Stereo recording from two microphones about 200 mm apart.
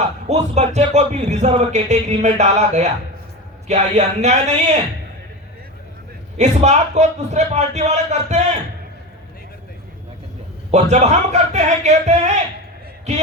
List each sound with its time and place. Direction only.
0.3 s speech: 35° right (ahead or behind)
6.3 s speech: 35° right (ahead or behind)
10.7 s speech: 35° right (ahead or behind)